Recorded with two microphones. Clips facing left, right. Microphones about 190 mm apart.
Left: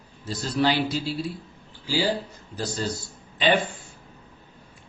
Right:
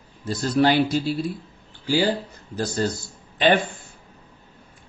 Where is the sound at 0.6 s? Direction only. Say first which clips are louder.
Right 4 dB; 50° right (ahead or behind).